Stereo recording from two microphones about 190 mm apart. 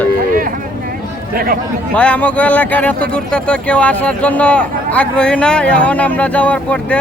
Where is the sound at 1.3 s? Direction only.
50° right (ahead or behind).